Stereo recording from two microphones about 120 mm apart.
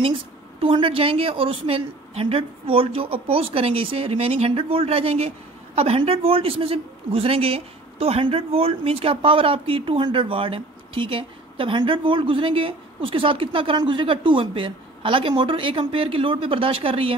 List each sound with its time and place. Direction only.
0.0 s a man's voice: 50° right (ahead or behind)